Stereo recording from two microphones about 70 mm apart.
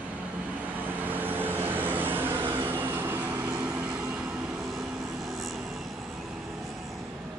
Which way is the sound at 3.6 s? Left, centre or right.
Centre.